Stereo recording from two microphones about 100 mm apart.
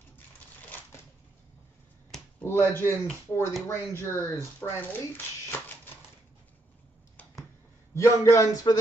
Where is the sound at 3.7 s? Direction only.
25° left (ahead or behind).